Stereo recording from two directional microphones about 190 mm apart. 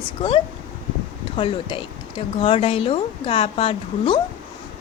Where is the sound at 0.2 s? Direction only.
30° left (ahead or behind).